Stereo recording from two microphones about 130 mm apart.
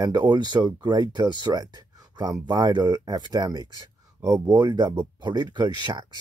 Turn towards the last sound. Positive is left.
turn(degrees=-35)  # may be behind; listen again after turning